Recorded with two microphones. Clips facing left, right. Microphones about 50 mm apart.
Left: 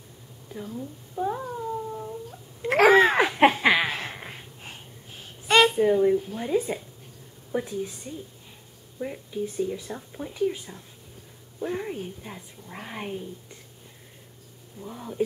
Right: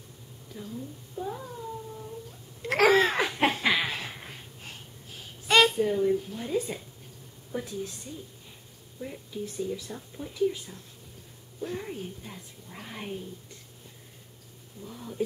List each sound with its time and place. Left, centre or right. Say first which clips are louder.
0.5 s a woman's voice: left 5 dB; left
1.1 s cat: left 7 dB; left
2.6 s a sound: left 5 dB; centre
5.8 s speech: left 5 dB; left
9.0 s speech: left 6 dB; left
14.8 s speech: left 4 dB; left